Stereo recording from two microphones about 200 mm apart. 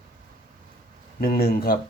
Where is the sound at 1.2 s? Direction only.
50° left (ahead or behind).